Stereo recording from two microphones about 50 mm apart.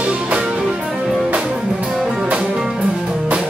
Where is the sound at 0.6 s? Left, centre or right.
Centre.